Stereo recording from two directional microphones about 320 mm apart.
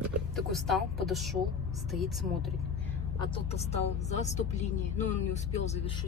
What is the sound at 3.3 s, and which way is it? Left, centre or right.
Speech, centre.